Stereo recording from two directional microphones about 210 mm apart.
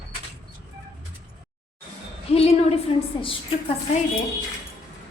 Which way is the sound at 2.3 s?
30° left (ahead or behind).